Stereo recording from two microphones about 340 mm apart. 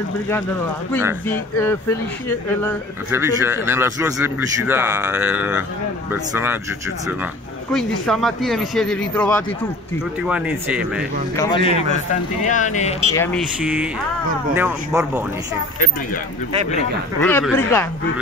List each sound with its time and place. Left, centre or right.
3.1 s a man's voice: centre
7.7 s speech: centre
11.3 s speech: centre
13.1 s speech: centre
13.6 s speech: centre
17.2 s speech: centre